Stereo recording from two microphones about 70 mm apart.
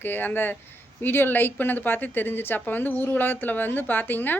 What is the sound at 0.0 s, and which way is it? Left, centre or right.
Speech, left.